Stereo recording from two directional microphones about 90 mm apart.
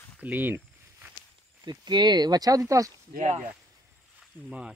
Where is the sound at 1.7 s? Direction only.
55° right (ahead or behind); by 2.9 s 35° right (ahead or behind).